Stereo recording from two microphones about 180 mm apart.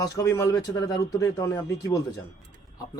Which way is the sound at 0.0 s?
20° left (ahead or behind).